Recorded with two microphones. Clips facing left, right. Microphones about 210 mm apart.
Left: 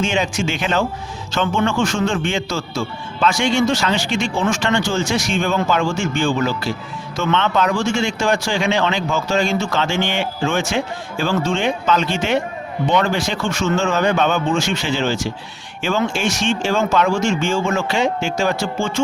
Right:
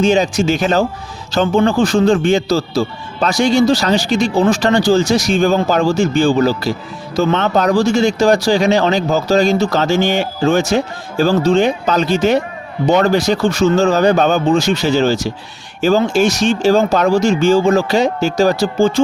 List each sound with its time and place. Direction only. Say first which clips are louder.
0.0 s speech: right 7 dB; 40° right (ahead or behind)